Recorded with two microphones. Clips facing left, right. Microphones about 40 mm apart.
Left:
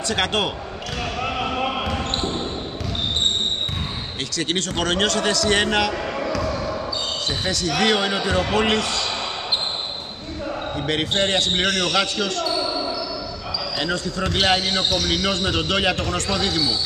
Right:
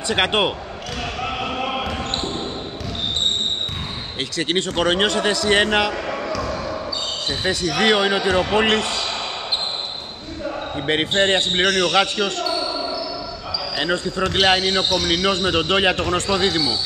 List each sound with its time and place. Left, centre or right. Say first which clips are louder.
0.1 s speech: right 4 dB; right
1.2 s basketball bounce: left 1 dB; centre
1.7 s a sound: even; centre
4.4 s speech: right 3 dB; right
5.9 s basketball bounce: even; centre
7.2 s speech: right 3 dB; centre
8.7 s a man's voice: right 1 dB; right
10.9 s speech: right 4 dB; right
11.6 s speech: right 3 dB; centre
11.9 s speech: right 3 dB; right
12.6 s basketball bounce: even; centre
13.9 s speech: right 3 dB; right
14.3 s speech: right 2 dB; centre
15.7 s speech: right 3 dB; right